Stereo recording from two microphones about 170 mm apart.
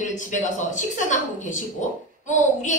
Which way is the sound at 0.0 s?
45° left (ahead or behind).